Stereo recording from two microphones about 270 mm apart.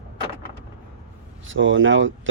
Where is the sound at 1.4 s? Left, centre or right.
Right.